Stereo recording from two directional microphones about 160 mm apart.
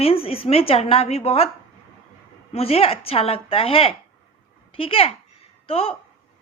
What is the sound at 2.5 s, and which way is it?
A woman's voice, 40° left (ahead or behind).